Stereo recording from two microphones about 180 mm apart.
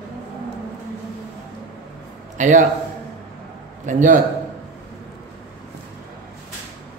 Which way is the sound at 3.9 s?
45° right (ahead or behind).